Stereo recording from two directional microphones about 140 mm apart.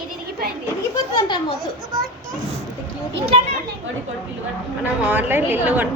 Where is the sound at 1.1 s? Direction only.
35° left (ahead or behind).